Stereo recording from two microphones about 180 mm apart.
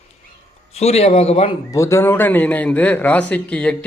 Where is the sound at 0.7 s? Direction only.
35° left (ahead or behind).